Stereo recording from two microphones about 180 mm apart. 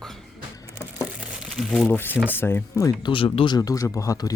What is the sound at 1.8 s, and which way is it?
Speech, 10° left (ahead or behind).